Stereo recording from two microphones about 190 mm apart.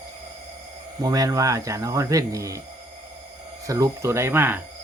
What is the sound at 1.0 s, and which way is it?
Speech, 20° right (ahead or behind).